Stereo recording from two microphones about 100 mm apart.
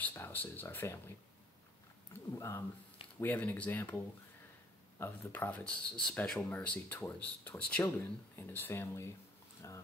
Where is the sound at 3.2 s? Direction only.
15° left (ahead or behind).